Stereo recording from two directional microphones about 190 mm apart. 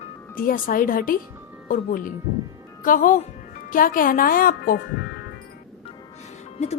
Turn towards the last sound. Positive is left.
turn(degrees=35)  # may be behind; listen again after turning